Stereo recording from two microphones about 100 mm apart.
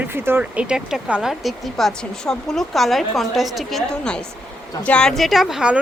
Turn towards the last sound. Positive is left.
turn(degrees=-5)  # may be behind; listen again after turning